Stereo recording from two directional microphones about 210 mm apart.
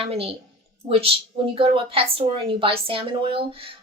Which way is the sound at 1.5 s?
25° right (ahead or behind).